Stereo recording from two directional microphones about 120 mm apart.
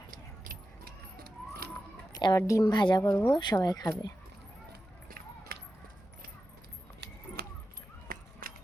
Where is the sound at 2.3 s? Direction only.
25° left (ahead or behind).